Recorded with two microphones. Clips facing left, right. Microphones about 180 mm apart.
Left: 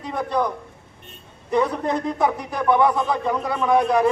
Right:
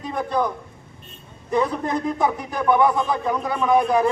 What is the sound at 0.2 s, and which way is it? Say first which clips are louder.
Speech: even; 10° right (ahead or behind).